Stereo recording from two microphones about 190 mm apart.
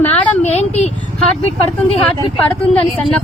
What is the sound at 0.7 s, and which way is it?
Speech, 35° left (ahead or behind).